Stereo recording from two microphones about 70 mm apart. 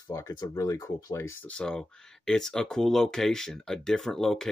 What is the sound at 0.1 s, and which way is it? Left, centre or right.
Speech, left.